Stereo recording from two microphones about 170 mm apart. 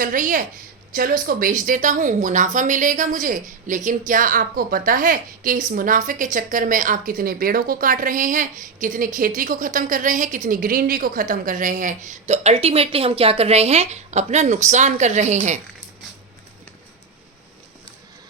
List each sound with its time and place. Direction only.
0.0 s speech: 55° right (ahead or behind)